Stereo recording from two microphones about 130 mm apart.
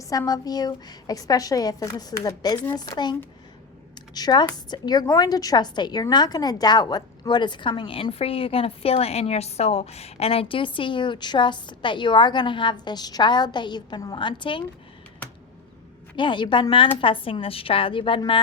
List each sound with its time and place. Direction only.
0.0 s a woman's voice: 30° left (ahead or behind)
16.1 s a woman's voice: 40° left (ahead or behind)